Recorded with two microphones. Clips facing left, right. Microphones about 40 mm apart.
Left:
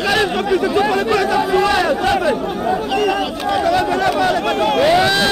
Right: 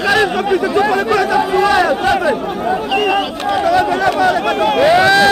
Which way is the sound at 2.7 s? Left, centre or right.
Right.